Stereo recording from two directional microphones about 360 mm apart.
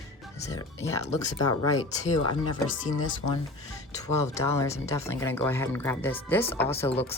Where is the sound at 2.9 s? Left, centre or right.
Left.